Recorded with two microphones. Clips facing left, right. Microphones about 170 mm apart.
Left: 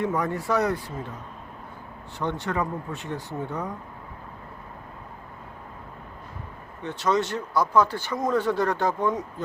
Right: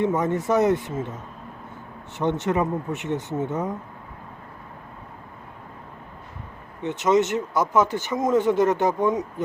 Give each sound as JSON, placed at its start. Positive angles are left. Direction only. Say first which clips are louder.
{"t": 0.0, "sound": "speech", "louder": "right 4 dB", "side_deg": -20}
{"t": 2.1, "sound": "speech", "louder": "right 5 dB", "side_deg": -20}
{"t": 6.8, "sound": "speech", "louder": "right 5 dB", "side_deg": -20}